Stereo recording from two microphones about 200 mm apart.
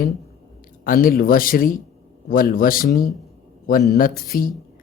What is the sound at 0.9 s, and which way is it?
A man's voice, 45° left (ahead or behind).